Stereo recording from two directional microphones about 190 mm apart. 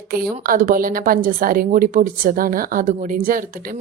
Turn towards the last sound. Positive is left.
turn(degrees=-50)  # may be behind; listen again after turning